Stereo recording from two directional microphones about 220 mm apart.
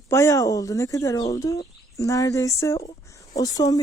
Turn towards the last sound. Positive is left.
turn(degrees=15)  # may be behind; listen again after turning